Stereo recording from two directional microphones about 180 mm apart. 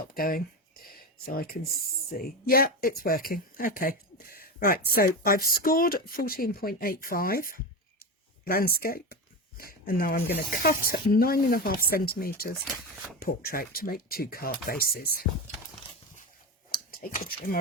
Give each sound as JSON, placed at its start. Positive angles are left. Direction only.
{"t": 0.1, "sound": "speech", "side_deg": 55}
{"t": 0.9, "sound": "a sound", "side_deg": 55}
{"t": 2.1, "sound": "speech", "side_deg": 55}
{"t": 16.7, "sound": "speech", "side_deg": 50}